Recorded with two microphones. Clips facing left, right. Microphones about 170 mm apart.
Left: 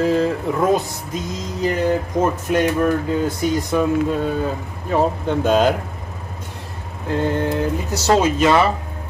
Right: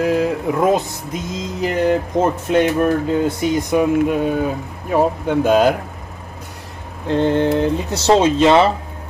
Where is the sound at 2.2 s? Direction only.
20° right (ahead or behind).